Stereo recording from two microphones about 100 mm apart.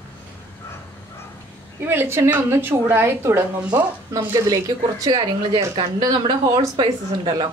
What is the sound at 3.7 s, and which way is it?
Speech, 40° right (ahead or behind).